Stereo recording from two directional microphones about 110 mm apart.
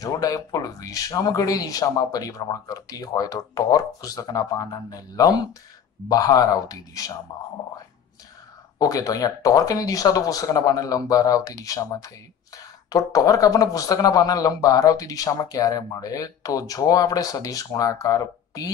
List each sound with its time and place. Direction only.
0.0 s speech: 35° left (ahead or behind)
8.7 s speech: 35° left (ahead or behind)